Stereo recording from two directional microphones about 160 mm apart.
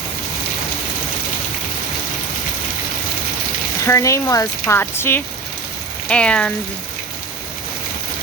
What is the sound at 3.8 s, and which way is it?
Speech, 20° left (ahead or behind).